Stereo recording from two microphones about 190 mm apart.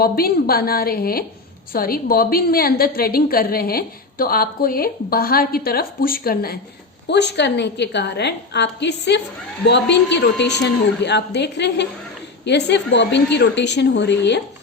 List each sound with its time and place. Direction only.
0.0 s a woman's voice: 50° left (ahead or behind)
7.1 s a woman's voice: 65° left (ahead or behind)